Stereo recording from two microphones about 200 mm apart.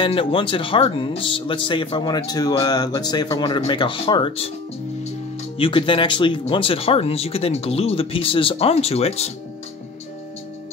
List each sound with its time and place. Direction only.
0.0 s speech: 25° left (ahead or behind)
5.6 s speech: 25° left (ahead or behind)